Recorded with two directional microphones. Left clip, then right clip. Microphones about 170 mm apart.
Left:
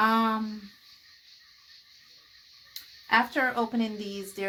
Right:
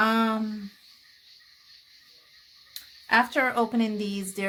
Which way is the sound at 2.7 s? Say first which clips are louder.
Right 2 dB; 35° right (ahead or behind).